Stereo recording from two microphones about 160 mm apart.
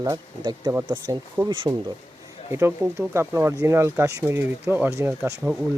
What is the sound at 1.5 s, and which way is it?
Speech, 30° right (ahead or behind).